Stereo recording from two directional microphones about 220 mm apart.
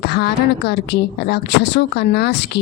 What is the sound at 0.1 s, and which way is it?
Speech, 50° left (ahead or behind).